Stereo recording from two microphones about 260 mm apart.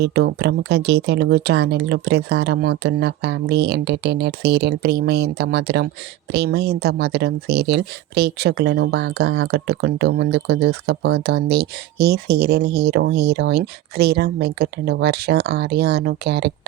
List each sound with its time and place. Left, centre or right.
0.0 s speech: right